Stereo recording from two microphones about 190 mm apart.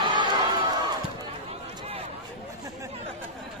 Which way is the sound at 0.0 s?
25° right (ahead or behind).